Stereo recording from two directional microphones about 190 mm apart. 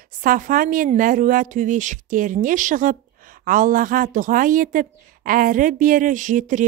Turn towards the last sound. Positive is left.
turn(degrees=-40)  # may be behind; listen again after turning